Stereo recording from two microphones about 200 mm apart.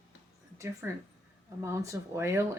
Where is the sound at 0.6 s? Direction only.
15° right (ahead or behind).